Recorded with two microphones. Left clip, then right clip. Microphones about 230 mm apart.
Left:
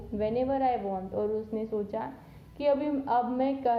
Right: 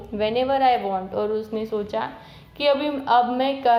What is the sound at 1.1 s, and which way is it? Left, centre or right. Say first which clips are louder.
Speech: right 6 dB; right.